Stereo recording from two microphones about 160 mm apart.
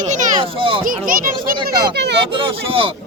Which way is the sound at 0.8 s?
60° right (ahead or behind).